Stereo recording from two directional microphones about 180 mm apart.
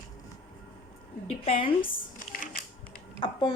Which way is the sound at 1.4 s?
30° left (ahead or behind).